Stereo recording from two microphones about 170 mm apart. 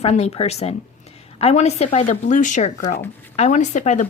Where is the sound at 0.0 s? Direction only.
40° left (ahead or behind).